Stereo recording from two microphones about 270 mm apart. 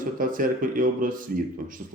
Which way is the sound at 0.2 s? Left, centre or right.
Right.